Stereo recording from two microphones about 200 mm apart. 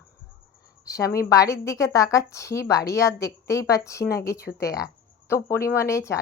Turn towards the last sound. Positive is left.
turn(degrees=15)  # may be behind; listen again after turning